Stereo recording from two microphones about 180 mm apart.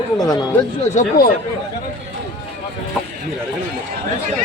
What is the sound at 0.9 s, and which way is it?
Speech, 55° left (ahead or behind).